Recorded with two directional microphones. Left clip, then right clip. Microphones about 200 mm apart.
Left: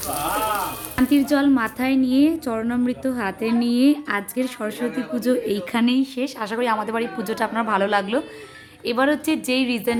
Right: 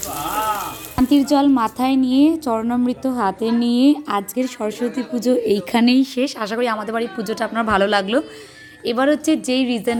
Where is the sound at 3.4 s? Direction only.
15° left (ahead or behind).